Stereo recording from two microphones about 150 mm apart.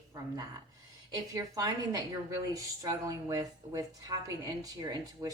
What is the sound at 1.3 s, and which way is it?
A woman's voice, 25° right (ahead or behind).